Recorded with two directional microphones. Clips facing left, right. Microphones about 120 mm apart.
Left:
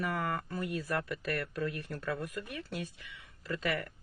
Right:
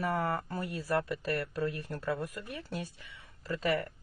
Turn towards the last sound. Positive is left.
turn(degrees=-35)  # may be behind; listen again after turning